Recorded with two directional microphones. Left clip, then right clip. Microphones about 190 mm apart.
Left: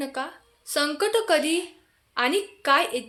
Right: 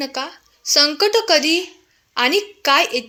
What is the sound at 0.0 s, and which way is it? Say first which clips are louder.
A woman's voice: right 5 dB; 25° right (ahead or behind).